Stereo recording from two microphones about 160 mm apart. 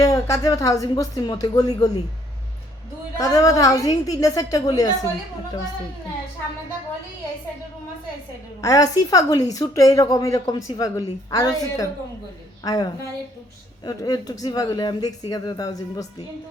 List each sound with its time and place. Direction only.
0.0 s a woman's voice: 20° left (ahead or behind)
3.2 s a woman's voice: 20° left (ahead or behind)
8.6 s a woman's voice: 25° left (ahead or behind)